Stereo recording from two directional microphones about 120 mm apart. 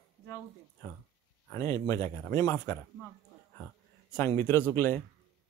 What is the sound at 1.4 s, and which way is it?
A man's voice, 25° left (ahead or behind).